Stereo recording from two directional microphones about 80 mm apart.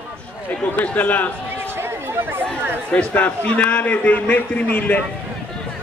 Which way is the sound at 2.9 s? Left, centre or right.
Centre.